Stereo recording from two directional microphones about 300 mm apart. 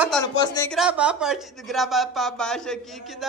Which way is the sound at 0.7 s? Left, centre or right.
Centre.